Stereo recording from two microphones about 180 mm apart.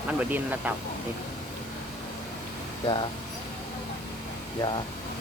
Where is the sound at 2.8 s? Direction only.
25° left (ahead or behind).